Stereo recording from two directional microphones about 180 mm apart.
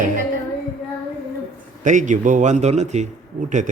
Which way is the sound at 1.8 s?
45° right (ahead or behind).